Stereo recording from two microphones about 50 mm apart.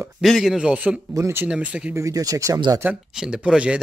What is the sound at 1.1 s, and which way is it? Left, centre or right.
Speech, right.